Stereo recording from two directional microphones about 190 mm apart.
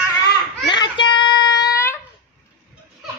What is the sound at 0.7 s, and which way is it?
Child singing, 25° left (ahead or behind).